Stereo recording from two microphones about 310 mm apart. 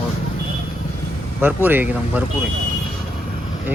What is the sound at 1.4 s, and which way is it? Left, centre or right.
Speech, centre.